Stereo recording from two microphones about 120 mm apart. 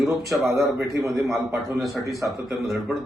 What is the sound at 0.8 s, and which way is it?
Speech, 25° right (ahead or behind).